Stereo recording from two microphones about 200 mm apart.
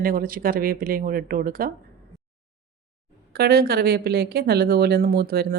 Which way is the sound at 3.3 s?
50° right (ahead or behind).